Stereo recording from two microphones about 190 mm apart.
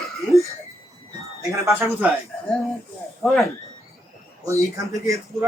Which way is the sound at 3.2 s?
Centre (ahead or behind).